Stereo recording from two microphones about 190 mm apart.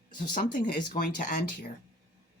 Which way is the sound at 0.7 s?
50° left (ahead or behind).